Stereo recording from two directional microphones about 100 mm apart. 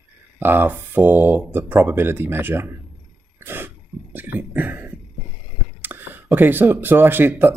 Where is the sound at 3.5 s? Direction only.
20° right (ahead or behind).